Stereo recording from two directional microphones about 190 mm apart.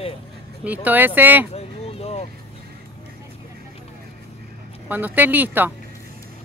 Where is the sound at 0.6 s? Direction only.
10° right (ahead or behind).